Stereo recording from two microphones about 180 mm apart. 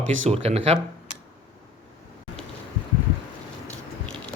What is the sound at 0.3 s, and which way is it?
Speech, 35° right (ahead or behind).